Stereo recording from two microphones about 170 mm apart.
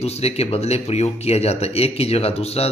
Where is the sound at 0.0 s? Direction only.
40° left (ahead or behind).